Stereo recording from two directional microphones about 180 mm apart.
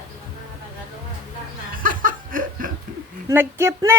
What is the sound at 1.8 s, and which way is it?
Laughter, 50° right (ahead or behind).